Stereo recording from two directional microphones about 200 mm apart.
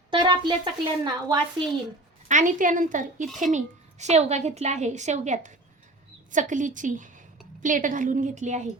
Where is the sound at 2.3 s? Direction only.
40° right (ahead or behind).